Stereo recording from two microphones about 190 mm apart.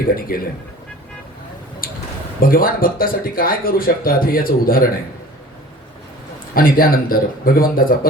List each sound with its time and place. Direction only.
0.0 s speech: 50° left (ahead or behind)
1.8 s a sound: 50° left (ahead or behind)
2.4 s speech: 50° left (ahead or behind)
6.5 s speech: 50° left (ahead or behind)